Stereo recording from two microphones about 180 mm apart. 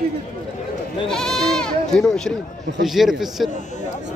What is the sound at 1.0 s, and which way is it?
Speech, centre (ahead or behind).